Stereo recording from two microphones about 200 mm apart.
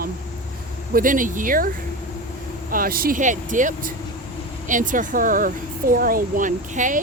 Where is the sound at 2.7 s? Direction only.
45° right (ahead or behind).